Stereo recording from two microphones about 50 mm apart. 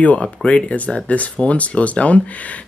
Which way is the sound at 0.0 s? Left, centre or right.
Left.